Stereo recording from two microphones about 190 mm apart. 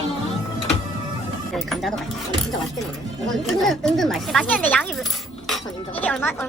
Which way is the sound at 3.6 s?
Centre (ahead or behind).